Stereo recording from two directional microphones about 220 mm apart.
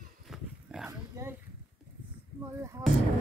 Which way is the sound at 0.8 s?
15° right (ahead or behind).